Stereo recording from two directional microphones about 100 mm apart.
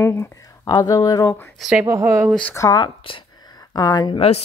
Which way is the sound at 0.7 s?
40° left (ahead or behind).